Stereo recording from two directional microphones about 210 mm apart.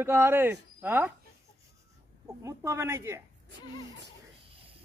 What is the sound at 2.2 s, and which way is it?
Speech, 15° right (ahead or behind).